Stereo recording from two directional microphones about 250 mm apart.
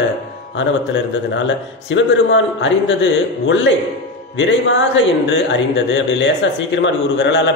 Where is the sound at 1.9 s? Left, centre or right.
Left.